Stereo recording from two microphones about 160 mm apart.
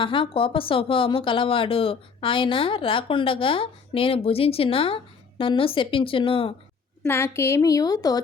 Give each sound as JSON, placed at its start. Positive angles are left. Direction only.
{"t": 0.0, "sound": "speech", "side_deg": 30}
{"t": 7.0, "sound": "a woman's voice", "side_deg": 15}